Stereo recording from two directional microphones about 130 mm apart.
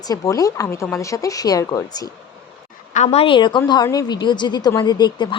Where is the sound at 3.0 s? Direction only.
50° left (ahead or behind).